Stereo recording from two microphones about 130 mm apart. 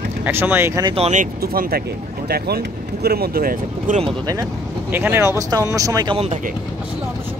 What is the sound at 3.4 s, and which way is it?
Speech, 90° right.